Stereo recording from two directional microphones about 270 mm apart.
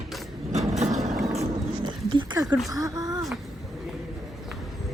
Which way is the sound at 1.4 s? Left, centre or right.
Centre.